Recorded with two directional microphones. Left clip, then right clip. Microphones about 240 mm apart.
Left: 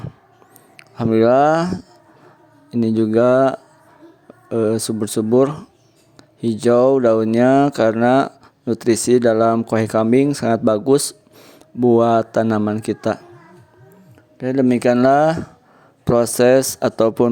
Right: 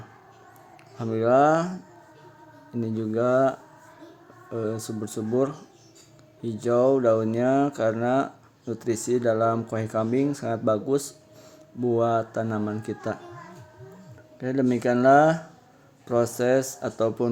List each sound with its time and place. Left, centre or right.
0.8 s speech: left
14.3 s speech: left